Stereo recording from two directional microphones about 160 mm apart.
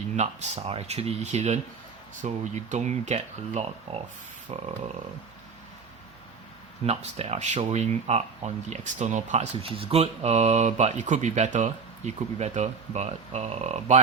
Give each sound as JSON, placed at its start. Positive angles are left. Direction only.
{"t": 0.2, "sound": "speech", "side_deg": -45}
{"t": 4.5, "sound": "a sound", "side_deg": -40}
{"t": 6.8, "sound": "speech", "side_deg": -40}